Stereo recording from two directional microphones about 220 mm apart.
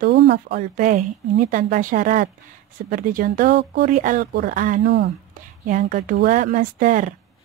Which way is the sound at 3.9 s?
35° right (ahead or behind).